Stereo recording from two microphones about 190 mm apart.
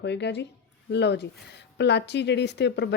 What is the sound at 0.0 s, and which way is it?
A woman's voice, 65° left (ahead or behind).